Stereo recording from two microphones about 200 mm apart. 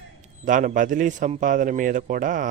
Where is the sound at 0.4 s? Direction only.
40° right (ahead or behind).